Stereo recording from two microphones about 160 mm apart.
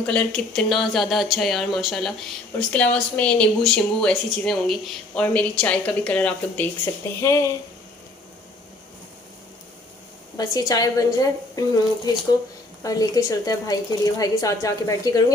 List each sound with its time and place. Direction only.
0.0 s speech: 5° left (ahead or behind)
10.3 s a woman's voice: 25° left (ahead or behind)